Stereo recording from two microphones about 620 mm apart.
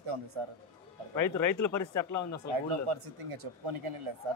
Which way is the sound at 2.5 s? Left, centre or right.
Right.